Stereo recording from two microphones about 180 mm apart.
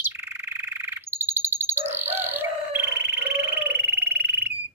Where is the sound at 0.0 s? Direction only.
10° right (ahead or behind).